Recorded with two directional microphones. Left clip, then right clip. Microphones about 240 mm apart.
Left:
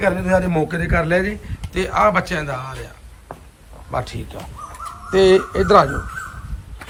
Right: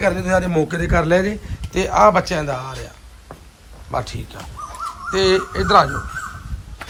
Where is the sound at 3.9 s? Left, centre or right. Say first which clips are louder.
Even; centre.